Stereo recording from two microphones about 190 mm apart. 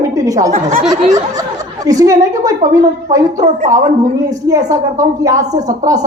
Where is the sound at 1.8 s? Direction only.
20° right (ahead or behind).